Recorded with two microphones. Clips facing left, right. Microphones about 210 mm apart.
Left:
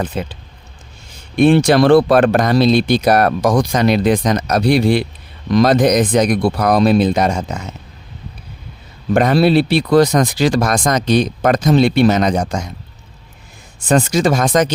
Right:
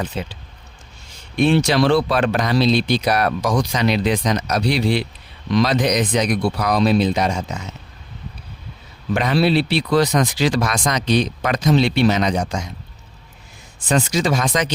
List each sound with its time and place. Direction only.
0.0 s speech: 50° left (ahead or behind)
1.4 s speech: 50° left (ahead or behind)
9.1 s speech: 50° left (ahead or behind)
13.8 s speech: 50° left (ahead or behind)